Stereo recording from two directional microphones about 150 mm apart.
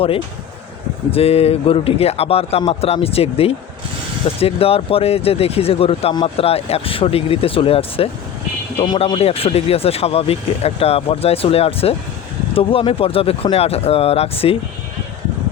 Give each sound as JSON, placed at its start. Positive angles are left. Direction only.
{"t": 1.1, "sound": "speech", "side_deg": 40}